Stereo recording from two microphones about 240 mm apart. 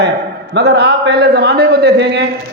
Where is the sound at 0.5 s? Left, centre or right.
Right.